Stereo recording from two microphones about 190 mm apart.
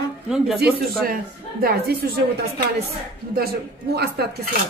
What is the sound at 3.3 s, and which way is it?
Speech, 55° right (ahead or behind).